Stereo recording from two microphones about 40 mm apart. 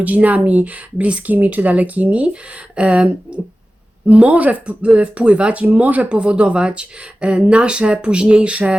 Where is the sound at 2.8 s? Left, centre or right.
Right.